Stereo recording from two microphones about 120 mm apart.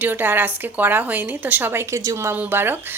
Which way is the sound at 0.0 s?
15° right (ahead or behind).